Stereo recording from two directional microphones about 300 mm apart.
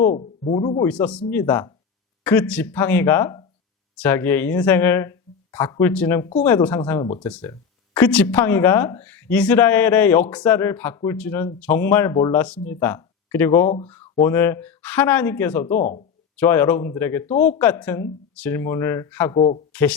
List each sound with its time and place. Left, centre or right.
0.0 s speech: left
0.9 s speech: centre
15.6 s speech: left
16.4 s speech: centre
19.4 s speech: centre